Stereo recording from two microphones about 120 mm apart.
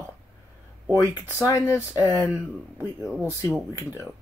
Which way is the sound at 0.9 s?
25° left (ahead or behind).